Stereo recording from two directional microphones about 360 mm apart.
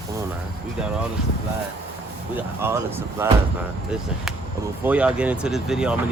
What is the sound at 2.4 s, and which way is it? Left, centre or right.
Speech, centre.